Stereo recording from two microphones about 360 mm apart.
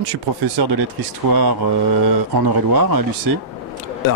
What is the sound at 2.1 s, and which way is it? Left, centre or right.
Speech, right.